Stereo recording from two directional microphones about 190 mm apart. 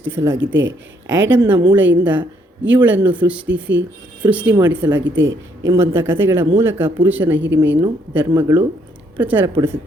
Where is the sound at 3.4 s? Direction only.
75° right (ahead or behind).